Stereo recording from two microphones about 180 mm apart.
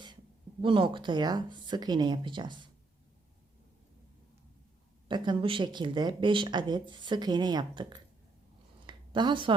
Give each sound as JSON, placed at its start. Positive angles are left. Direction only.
{"t": 0.6, "sound": "speech", "side_deg": -30}
{"t": 5.0, "sound": "speech", "side_deg": -25}
{"t": 8.9, "sound": "a sound", "side_deg": -25}